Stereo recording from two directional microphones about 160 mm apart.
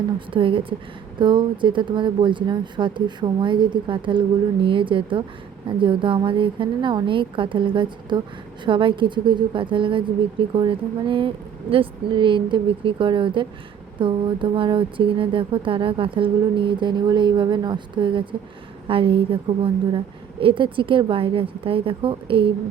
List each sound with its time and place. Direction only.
0.3 s speech: 35° right (ahead or behind)